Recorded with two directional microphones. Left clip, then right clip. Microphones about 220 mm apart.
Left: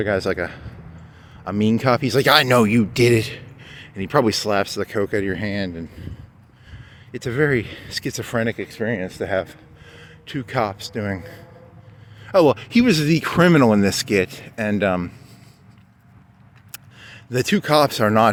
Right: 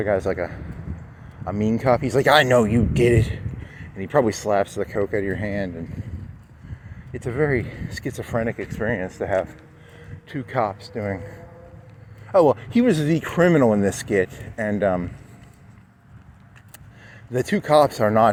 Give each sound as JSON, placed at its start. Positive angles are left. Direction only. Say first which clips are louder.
{"t": 0.0, "sound": "speech", "louder": "left 1 dB", "side_deg": 35}
{"t": 7.1, "sound": "speech", "louder": "left 3 dB", "side_deg": 35}
{"t": 17.0, "sound": "speech", "louder": "left 2 dB", "side_deg": 30}